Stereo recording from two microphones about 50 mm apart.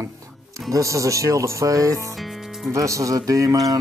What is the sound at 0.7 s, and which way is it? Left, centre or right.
Speech, right.